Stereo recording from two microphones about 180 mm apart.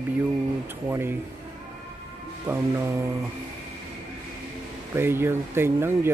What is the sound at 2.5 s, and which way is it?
Mantra, 15° right (ahead or behind).